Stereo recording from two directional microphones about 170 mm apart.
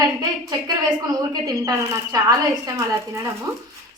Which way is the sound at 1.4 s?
20° right (ahead or behind).